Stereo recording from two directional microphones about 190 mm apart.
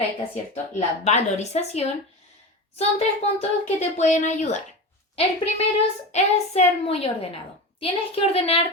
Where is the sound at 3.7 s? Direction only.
40° left (ahead or behind).